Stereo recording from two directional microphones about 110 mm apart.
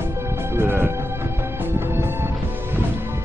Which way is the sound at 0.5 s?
20° right (ahead or behind).